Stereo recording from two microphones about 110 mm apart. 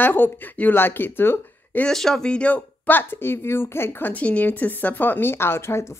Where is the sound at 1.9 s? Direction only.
5° left (ahead or behind).